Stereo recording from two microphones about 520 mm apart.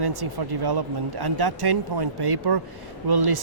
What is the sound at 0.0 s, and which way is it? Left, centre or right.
Speech, right.